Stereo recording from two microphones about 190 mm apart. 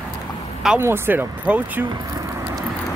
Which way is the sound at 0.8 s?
15° right (ahead or behind).